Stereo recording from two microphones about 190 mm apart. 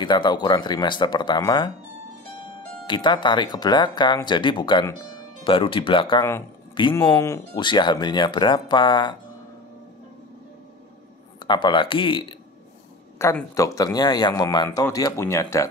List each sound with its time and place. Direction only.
0.0 s speech: 25° left (ahead or behind)
2.9 s speech: 25° left (ahead or behind)
11.4 s speech: 25° left (ahead or behind)
13.2 s speech: 15° left (ahead or behind)